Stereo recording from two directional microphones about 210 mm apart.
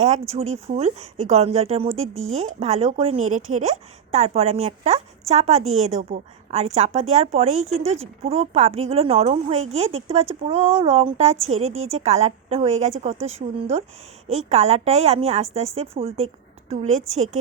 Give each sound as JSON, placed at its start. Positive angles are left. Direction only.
{"t": 0.0, "sound": "a woman's voice", "side_deg": -30}